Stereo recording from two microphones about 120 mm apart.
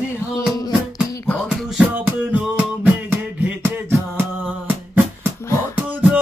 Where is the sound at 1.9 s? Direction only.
15° right (ahead or behind).